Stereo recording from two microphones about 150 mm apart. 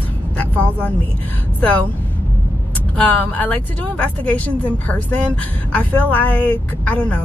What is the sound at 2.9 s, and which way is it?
A woman's voice, 10° left (ahead or behind).